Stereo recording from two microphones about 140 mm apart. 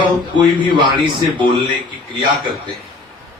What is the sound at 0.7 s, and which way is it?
Speech, 35° right (ahead or behind).